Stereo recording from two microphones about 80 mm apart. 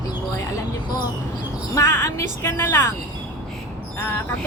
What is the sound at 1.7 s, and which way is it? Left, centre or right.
Speech, left.